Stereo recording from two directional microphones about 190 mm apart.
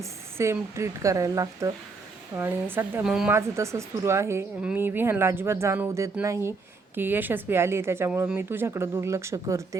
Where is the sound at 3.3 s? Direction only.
15° right (ahead or behind).